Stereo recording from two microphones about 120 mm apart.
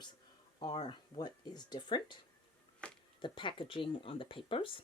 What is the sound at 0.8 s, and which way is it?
Speech, 40° left (ahead or behind).